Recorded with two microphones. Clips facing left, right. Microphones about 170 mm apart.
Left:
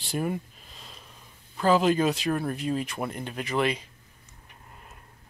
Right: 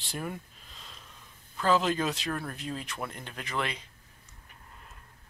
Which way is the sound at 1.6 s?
10° left (ahead or behind).